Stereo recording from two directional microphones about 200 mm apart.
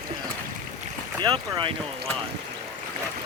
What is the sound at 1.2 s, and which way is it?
Speech, 25° right (ahead or behind).